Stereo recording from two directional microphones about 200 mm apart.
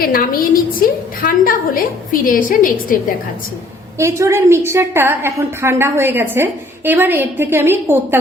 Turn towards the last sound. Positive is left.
turn(degrees=-10)  # may be behind; listen again after turning